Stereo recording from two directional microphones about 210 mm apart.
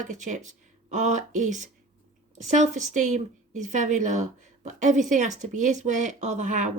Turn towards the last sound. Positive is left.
turn(degrees=-35)  # may be behind; listen again after turning